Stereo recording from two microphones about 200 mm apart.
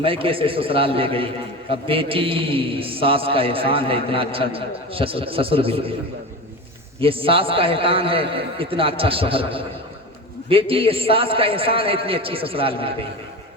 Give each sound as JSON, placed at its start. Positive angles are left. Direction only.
{"t": 0.0, "sound": "a man's voice", "side_deg": -25}
{"t": 7.0, "sound": "a man's voice", "side_deg": -25}